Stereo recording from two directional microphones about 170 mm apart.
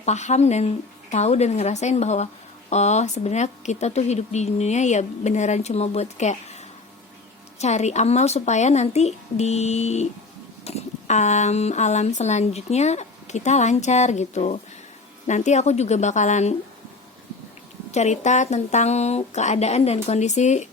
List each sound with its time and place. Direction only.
0.0 s speech: 45° left (ahead or behind)
7.6 s a woman's voice: 40° left (ahead or behind)
17.9 s speech: 40° left (ahead or behind)